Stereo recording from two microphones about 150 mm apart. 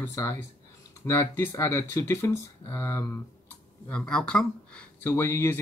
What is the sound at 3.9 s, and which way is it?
Speech, 5° left (ahead or behind).